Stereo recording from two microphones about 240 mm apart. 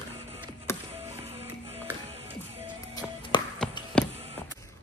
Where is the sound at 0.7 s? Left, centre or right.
Centre.